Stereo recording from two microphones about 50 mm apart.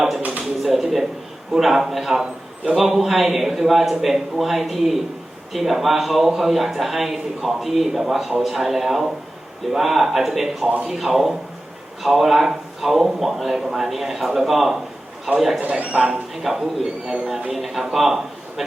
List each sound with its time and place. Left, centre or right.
0.2 s a sound: right
0.6 s a man's voice: centre
15.9 s speech: centre
16.3 s a man's voice: centre